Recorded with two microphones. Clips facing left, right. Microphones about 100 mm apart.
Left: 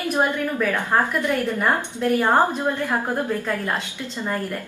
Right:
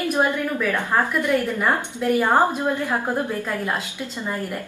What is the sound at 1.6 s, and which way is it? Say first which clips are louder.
A woman's voice: left 1 dB; 10° right (ahead or behind).